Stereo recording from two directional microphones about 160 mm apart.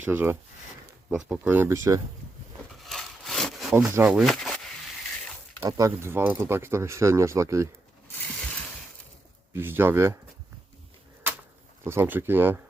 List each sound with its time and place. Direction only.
0.0 s speech: 10° right (ahead or behind)
2.7 s crumpling: centre (ahead or behind)
3.9 s speech: 10° right (ahead or behind)
4.2 s a sound: centre (ahead or behind)
5.6 s speech: 20° right (ahead or behind)
9.5 s speech: 15° right (ahead or behind)
11.9 s speech: 15° right (ahead or behind)